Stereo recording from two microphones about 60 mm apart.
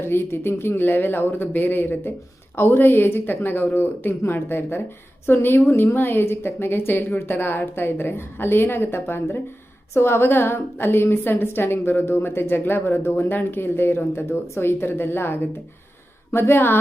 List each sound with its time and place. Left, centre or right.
0.0 s a woman's voice: left